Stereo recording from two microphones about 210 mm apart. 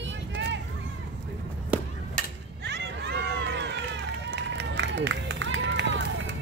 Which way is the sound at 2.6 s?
55° right (ahead or behind).